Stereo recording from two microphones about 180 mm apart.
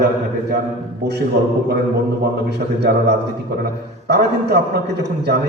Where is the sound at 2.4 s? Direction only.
65° right (ahead or behind).